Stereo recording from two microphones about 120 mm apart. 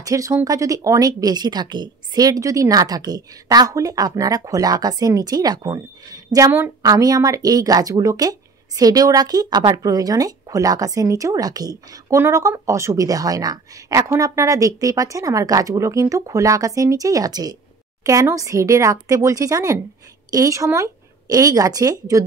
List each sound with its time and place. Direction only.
0.0 s a woman's voice: 25° right (ahead or behind)